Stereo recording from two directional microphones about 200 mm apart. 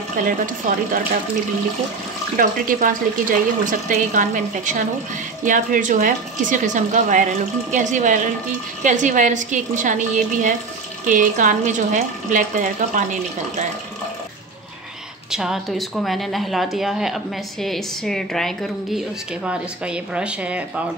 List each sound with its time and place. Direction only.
0.2 s a woman's voice: 40° right (ahead or behind)
2.3 s a woman's voice: 40° right (ahead or behind)
15.3 s a woman's voice: centre (ahead or behind)